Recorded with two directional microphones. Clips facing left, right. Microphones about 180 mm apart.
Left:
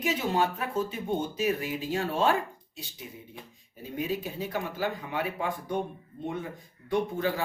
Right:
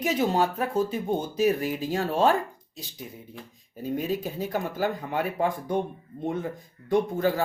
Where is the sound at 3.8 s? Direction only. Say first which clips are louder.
Right 4 dB; 40° right (ahead or behind).